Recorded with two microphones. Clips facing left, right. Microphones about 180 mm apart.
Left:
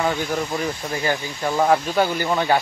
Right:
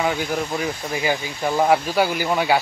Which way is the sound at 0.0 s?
Centre (ahead or behind).